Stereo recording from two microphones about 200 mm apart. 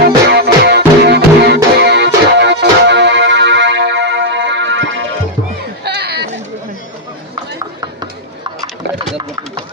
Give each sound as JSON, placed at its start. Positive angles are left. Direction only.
{"t": 0.3, "sound": "music", "side_deg": -55}
{"t": 5.8, "sound": "chatter", "side_deg": -55}
{"t": 9.1, "sound": "a sound", "side_deg": -25}